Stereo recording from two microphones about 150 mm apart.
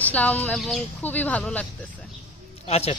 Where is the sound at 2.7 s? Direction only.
45° left (ahead or behind).